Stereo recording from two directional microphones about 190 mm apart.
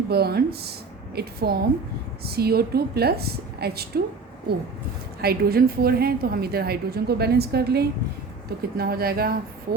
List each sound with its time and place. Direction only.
0.1 s a woman's voice: 55° right (ahead or behind)
5.2 s a woman's voice: 55° right (ahead or behind)